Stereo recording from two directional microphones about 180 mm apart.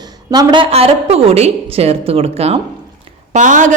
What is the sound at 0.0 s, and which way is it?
A woman's voice, 20° right (ahead or behind).